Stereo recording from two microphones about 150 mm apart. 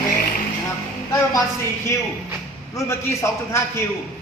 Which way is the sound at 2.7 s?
20° left (ahead or behind).